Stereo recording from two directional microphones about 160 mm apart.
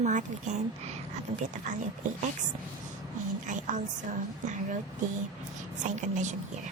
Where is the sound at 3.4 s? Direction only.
50° right (ahead or behind).